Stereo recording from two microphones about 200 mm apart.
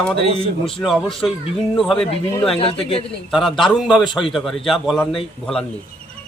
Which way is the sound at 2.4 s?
30° left (ahead or behind).